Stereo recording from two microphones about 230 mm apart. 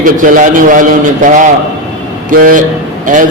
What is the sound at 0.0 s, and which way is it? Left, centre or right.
A man's voice, right.